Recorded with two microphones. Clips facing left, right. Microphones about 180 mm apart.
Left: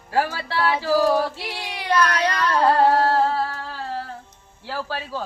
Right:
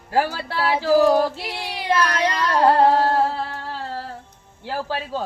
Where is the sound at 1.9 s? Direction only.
25° right (ahead or behind).